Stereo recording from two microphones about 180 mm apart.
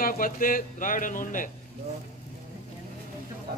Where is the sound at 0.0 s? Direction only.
50° left (ahead or behind).